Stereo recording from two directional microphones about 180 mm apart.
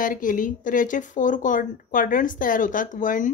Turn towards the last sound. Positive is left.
turn(degrees=45)  # may be behind; listen again after turning